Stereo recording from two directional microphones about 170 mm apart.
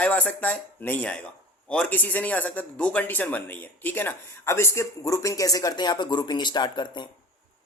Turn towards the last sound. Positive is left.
turn(degrees=25)  # may be behind; listen again after turning